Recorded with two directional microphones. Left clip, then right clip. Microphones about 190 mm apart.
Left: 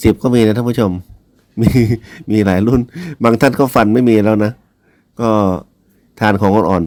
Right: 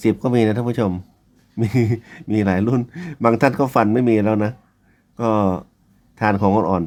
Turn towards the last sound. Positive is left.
turn(degrees=25)  # may be behind; listen again after turning